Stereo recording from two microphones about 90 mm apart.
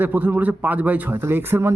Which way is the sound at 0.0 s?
20° right (ahead or behind).